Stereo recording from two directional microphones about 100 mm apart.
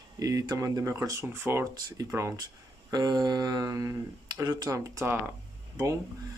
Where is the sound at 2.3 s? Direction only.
40° right (ahead or behind); by 5.3 s 25° right (ahead or behind).